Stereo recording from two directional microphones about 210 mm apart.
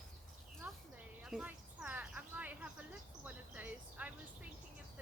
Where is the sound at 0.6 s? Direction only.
10° right (ahead or behind).